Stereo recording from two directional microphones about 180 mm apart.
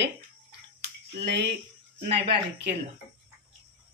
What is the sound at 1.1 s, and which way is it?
Speech, 70° right (ahead or behind).